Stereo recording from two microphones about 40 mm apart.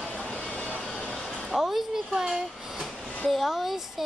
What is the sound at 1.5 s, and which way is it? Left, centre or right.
Speech, centre.